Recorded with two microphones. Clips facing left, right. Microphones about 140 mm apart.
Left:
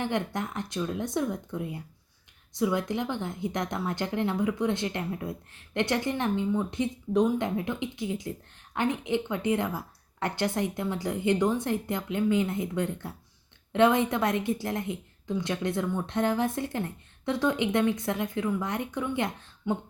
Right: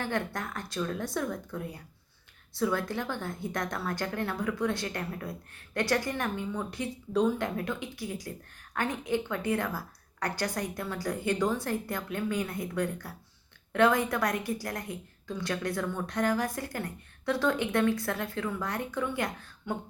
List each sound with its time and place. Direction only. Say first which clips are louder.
0.0 s a woman's voice: left 3 dB; 20° left (ahead or behind)